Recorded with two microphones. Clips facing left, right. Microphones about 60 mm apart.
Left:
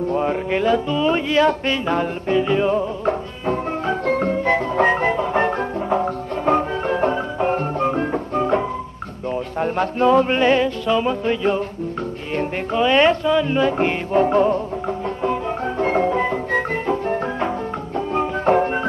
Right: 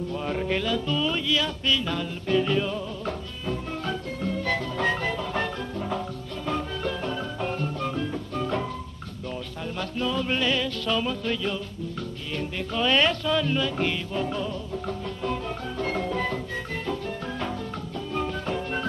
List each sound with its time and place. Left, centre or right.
0.1 s music: left
2.3 s speech: left
2.6 s music: left
4.0 s music: left
4.3 s music: left
9.6 s music: left
10.9 s speech: left
12.8 s speech: left
13.6 s music: left
14.9 s music: left